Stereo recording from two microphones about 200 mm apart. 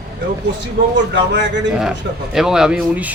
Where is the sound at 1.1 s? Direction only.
60° right (ahead or behind).